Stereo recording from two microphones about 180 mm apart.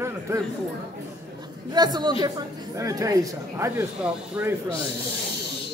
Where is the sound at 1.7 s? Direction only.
25° right (ahead or behind).